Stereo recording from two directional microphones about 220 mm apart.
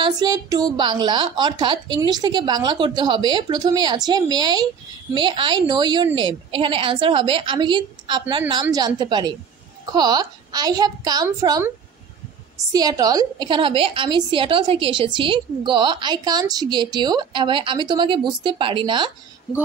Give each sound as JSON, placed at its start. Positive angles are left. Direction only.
{"t": 0.0, "sound": "a woman's voice", "side_deg": -20}
{"t": 12.7, "sound": "a woman's voice", "side_deg": -15}